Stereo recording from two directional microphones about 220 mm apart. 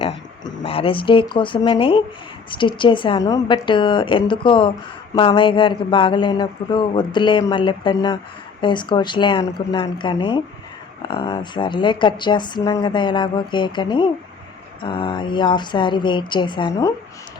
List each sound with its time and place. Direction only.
0.0 s a woman's voice: 25° left (ahead or behind)